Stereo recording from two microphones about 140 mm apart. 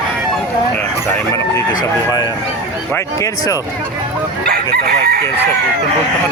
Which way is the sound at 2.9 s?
20° left (ahead or behind).